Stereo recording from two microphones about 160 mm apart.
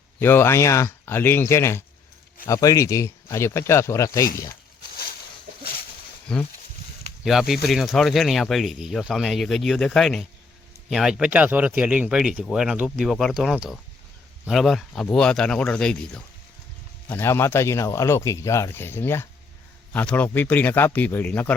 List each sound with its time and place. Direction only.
0.2 s speech: 15° left (ahead or behind)
6.3 s speech: 5° left (ahead or behind)